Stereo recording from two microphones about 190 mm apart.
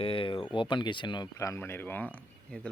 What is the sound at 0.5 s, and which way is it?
Speech, 25° left (ahead or behind).